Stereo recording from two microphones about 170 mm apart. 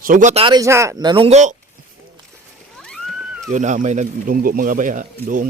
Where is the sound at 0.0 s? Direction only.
50° right (ahead or behind).